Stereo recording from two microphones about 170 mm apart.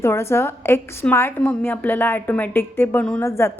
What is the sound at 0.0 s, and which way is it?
A woman's voice, 15° left (ahead or behind).